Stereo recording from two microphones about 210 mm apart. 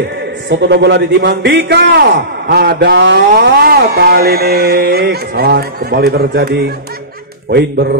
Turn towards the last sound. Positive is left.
turn(degrees=-50)  # may be behind; listen again after turning